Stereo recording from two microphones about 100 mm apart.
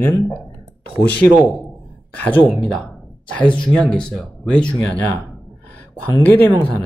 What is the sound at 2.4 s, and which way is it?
Speech, 5° left (ahead or behind).